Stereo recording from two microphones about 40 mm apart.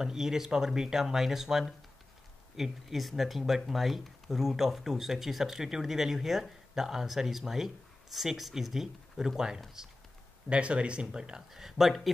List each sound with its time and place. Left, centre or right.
0.0 s speech: centre
10.5 s speech: right
11.5 s speech: centre